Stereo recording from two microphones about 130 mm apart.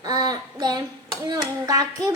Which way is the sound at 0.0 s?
30° right (ahead or behind).